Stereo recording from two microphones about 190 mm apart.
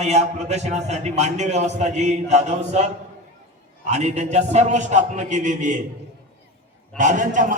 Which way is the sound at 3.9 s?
35° right (ahead or behind).